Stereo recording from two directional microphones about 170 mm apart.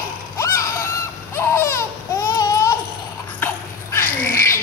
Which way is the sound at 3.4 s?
15° left (ahead or behind).